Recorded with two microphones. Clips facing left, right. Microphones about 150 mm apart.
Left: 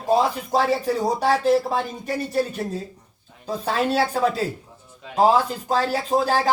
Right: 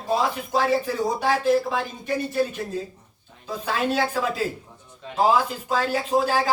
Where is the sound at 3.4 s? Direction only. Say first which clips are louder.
Left 2 dB; 35° left (ahead or behind).